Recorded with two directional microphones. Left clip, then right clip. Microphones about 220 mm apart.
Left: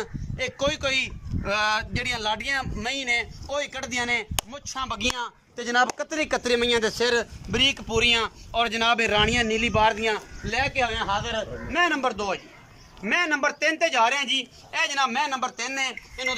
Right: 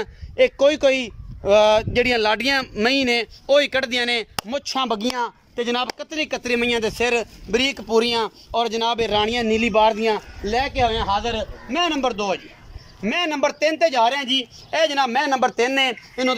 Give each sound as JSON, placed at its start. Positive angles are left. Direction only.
{"t": 0.0, "sound": "a man's voice", "side_deg": -40}
{"t": 5.1, "sound": "a man's voice", "side_deg": -20}